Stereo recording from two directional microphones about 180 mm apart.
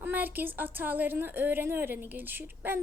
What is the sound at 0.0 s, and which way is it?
Speech, 10° right (ahead or behind).